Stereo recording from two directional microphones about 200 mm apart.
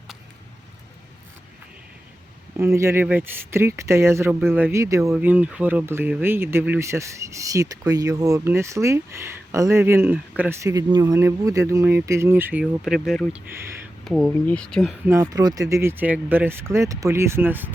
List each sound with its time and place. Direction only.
2.6 s speech: 15° right (ahead or behind); by 14.9 s centre (ahead or behind)
15.0 s speech: 15° right (ahead or behind)